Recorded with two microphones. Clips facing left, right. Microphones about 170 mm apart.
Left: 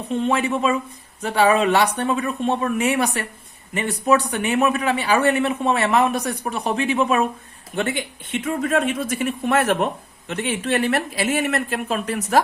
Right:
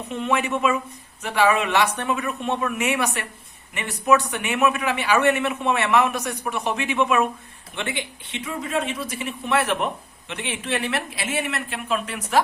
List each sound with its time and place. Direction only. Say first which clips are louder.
0.1 s speech: left 3 dB; 35° left (ahead or behind)